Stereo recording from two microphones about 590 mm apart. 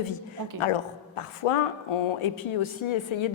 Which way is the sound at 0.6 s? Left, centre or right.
Left.